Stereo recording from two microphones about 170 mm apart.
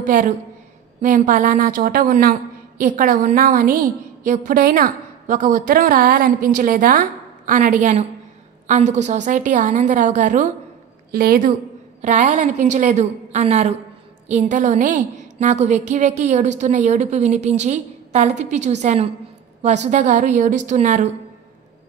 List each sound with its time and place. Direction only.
0.0 s a woman's voice: 50° right (ahead or behind)
11.1 s a woman's voice: 60° right (ahead or behind)
12.0 s a woman's voice: 45° right (ahead or behind)